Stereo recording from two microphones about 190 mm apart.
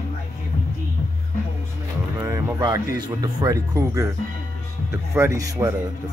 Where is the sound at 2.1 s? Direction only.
20° right (ahead or behind).